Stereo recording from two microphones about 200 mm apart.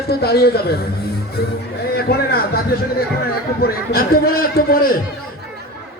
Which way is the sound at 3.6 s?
50° left (ahead or behind).